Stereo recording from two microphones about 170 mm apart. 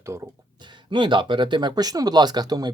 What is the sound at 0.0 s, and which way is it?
Speech, 20° right (ahead or behind).